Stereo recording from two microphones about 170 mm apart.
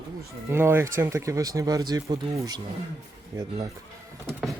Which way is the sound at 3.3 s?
20° right (ahead or behind).